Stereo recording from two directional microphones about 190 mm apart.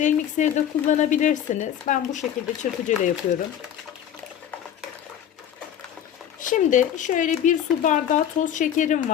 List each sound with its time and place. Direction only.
0.0 s speech: 40° left (ahead or behind)
6.4 s speech: 40° left (ahead or behind)